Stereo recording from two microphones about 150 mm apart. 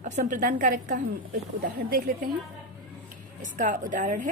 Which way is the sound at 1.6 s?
75° right (ahead or behind).